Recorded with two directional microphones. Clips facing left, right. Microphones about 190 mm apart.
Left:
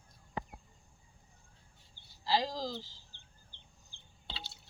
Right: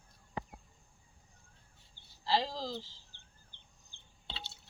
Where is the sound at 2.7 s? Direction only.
30° right (ahead or behind).